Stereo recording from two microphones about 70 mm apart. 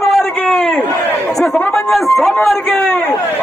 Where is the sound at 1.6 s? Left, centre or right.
Centre.